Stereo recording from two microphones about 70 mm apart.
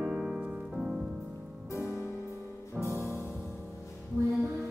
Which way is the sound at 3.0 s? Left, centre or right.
Left.